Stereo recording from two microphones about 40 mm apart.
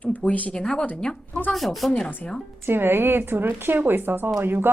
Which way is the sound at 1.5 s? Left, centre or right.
Centre.